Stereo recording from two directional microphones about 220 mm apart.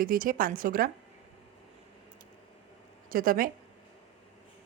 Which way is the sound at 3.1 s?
40° right (ahead or behind).